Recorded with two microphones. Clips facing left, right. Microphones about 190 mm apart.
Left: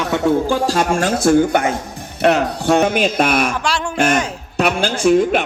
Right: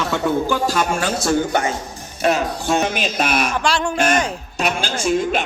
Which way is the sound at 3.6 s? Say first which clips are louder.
Right 1 dB; 5° left (ahead or behind).